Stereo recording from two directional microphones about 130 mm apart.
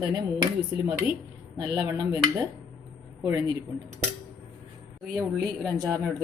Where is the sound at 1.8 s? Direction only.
30° right (ahead or behind).